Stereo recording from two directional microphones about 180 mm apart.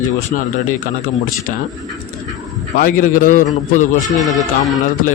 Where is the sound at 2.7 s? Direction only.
50° left (ahead or behind).